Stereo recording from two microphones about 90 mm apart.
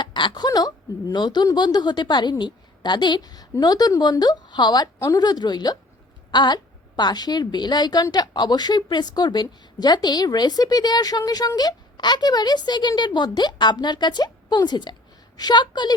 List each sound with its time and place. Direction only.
0.0 s a woman's voice: 60° left (ahead or behind)
4.9 s speech: 35° left (ahead or behind)
5.2 s a woman's voice: 50° left (ahead or behind)